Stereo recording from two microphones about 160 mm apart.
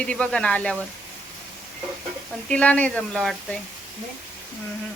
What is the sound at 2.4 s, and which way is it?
Speech, 5° left (ahead or behind).